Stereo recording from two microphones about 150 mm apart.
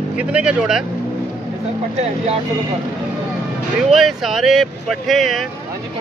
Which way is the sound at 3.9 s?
Centre (ahead or behind).